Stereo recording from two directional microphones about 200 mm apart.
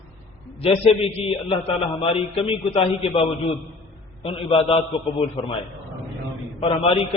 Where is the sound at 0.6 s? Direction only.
30° left (ahead or behind).